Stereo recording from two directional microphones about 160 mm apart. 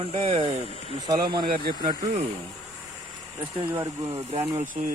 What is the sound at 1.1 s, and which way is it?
Speech, 25° right (ahead or behind).